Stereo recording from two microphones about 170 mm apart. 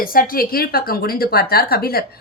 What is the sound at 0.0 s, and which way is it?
A woman's voice, 60° left (ahead or behind).